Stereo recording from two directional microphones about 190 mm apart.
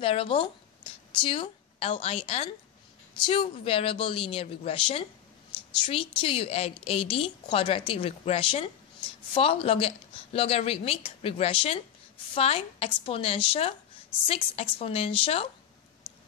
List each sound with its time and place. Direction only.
0.0 s a woman's voice: 30° left (ahead or behind)